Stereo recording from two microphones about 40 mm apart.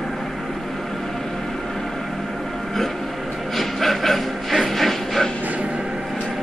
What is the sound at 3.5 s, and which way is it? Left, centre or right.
Printer, centre.